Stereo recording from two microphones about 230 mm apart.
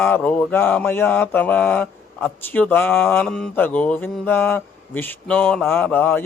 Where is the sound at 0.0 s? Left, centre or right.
Centre.